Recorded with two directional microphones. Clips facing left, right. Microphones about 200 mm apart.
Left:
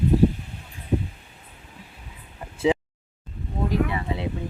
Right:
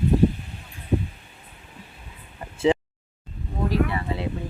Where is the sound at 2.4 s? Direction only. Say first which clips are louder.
Right 1 dB; 5° left (ahead or behind).